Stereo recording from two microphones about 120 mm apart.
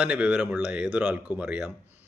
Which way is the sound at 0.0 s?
10° right (ahead or behind).